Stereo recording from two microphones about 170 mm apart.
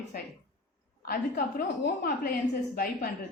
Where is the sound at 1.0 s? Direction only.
60° left (ahead or behind).